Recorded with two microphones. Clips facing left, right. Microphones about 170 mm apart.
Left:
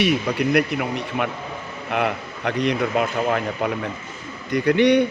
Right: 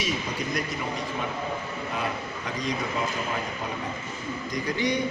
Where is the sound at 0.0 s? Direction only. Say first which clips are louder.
Left 10 dB; 65° left (ahead or behind).